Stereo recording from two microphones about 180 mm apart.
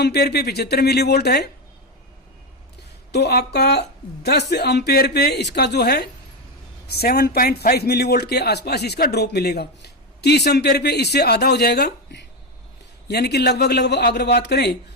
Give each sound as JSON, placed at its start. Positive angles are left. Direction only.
{"t": 0.0, "sound": "a man's voice", "side_deg": 65}
{"t": 3.1, "sound": "a man's voice", "side_deg": 65}